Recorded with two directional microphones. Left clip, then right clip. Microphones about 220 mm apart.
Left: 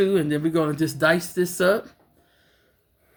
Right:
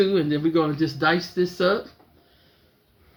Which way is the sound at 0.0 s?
50° left (ahead or behind).